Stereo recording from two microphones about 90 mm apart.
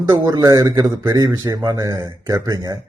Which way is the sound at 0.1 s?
45° right (ahead or behind).